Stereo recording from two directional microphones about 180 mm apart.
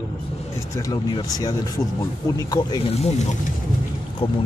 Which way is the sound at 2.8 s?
35° left (ahead or behind).